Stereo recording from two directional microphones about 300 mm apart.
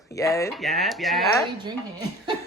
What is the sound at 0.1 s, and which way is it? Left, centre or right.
Speech, centre.